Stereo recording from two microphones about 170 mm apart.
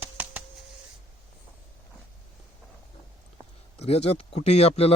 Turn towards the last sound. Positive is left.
turn(degrees=35)  # may be behind; listen again after turning